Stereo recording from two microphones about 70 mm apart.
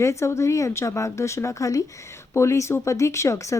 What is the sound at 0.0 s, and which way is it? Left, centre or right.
Speech, left.